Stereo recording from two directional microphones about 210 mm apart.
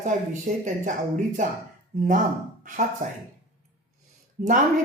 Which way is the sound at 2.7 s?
40° right (ahead or behind).